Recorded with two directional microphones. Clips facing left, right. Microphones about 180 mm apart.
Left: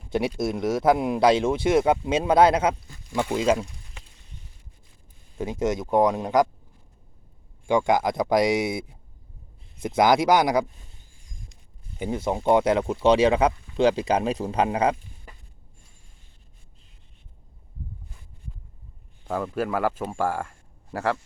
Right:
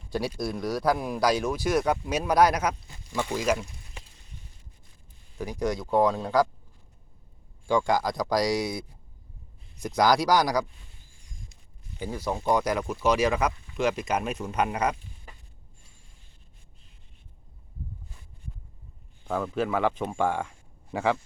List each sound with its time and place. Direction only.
0.1 s speech: 20° left (ahead or behind)
3.1 s speech: 5° left (ahead or behind)
3.3 s speech: 25° left (ahead or behind)
5.4 s speech: 25° left (ahead or behind)
7.7 s speech: 20° left (ahead or behind)
11.9 s speech: 20° left (ahead or behind)
19.3 s speech: 5° left (ahead or behind)